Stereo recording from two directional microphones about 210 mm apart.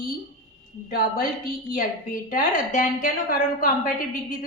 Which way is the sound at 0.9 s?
45° left (ahead or behind).